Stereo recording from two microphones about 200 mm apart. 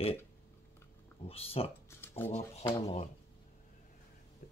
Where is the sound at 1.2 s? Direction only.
30° left (ahead or behind).